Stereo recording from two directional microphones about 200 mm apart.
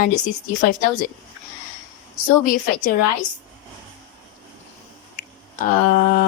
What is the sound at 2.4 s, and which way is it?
Speech, 45° left (ahead or behind).